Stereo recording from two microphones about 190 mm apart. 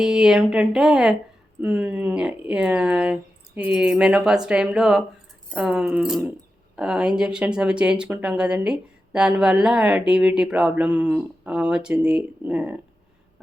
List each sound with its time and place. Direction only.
0.0 s speech: centre (ahead or behind)